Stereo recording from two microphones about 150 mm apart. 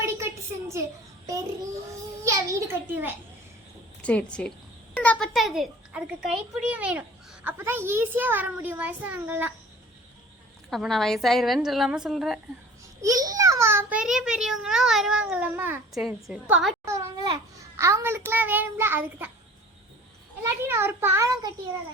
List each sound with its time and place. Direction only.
0.3 s a sound: 20° right (ahead or behind)
2.2 s a child's voice: 20° right (ahead or behind)
4.0 s a woman's voice: 10° left (ahead or behind); by 9.5 s 10° right (ahead or behind)
10.7 s a child's voice: centre (ahead or behind)
13.0 s a child's voice: 20° right (ahead or behind)
14.0 s a child's voice: 5° right (ahead or behind)
16.0 s a child's voice: centre (ahead or behind)
16.8 s a sound: 20° right (ahead or behind)
17.7 s a child's voice: 20° right (ahead or behind)
20.4 s a child's voice: 15° right (ahead or behind)